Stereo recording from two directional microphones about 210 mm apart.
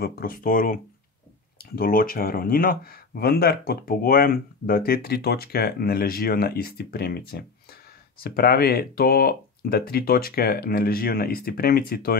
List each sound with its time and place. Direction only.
0.0 s speech: 45° left (ahead or behind)
1.8 s speech: 45° left (ahead or behind)